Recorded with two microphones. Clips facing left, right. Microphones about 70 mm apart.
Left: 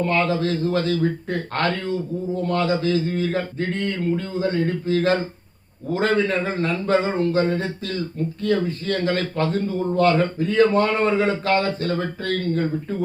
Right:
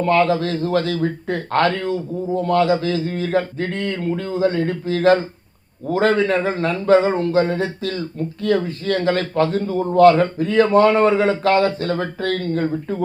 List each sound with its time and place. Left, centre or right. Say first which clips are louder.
0.0 s a man's voice: right 4 dB; right